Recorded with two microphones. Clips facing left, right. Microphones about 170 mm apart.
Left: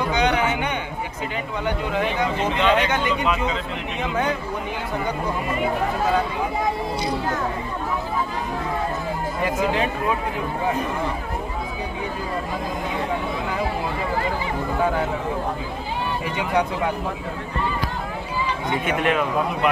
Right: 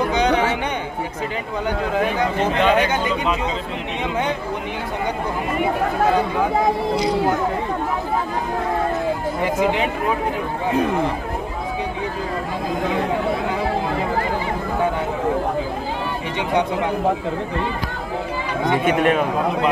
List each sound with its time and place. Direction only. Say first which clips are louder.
0.1 s a sound: right 3 dB; 35° right (ahead or behind)
2.6 s speech: right 2 dB; 45° right (ahead or behind)
2.9 s speech: right 1 dB; 35° right (ahead or behind)
9.4 s speech: right 2 dB; 20° right (ahead or behind)
18.9 s speech: right 3 dB; 45° right (ahead or behind)